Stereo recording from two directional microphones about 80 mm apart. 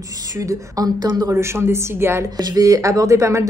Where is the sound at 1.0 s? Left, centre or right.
Right.